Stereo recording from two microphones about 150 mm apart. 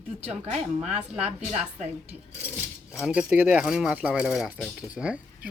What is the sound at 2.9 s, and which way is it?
Speech, 5° right (ahead or behind).